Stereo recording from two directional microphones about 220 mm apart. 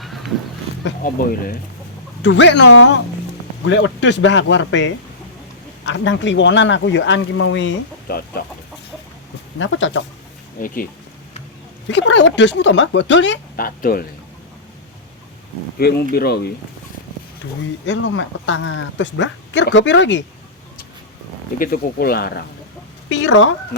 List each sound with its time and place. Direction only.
1.0 s speech: 40° left (ahead or behind)
2.2 s speech: 55° left (ahead or behind)
8.0 s speech: 45° left (ahead or behind)
9.6 s speech: 60° left (ahead or behind)
10.6 s speech: 40° left (ahead or behind)
11.9 s speech: 55° left (ahead or behind)
15.8 s speech: 45° left (ahead or behind)
21.6 s speech: 45° left (ahead or behind)
23.0 s speech: 60° left (ahead or behind)